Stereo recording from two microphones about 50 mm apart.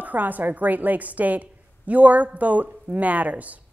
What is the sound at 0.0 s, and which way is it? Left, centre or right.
A woman's voice, right.